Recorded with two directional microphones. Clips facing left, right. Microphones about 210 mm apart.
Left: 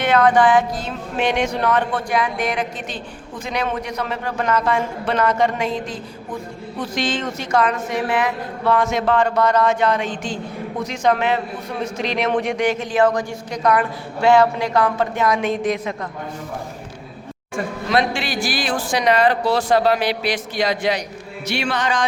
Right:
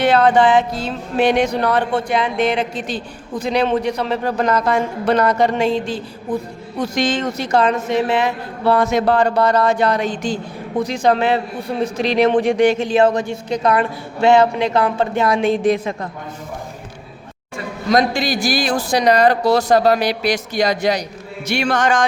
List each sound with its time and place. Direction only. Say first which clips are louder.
0.0 s music: right 2 dB; 30° right (ahead or behind)
6.7 s music: right 4 dB; 45° right (ahead or behind)
12.4 s a woman's voice: right 6 dB; 30° right (ahead or behind)
17.8 s music: right 5 dB; 40° right (ahead or behind)
21.4 s speech: right 5 dB; 45° right (ahead or behind)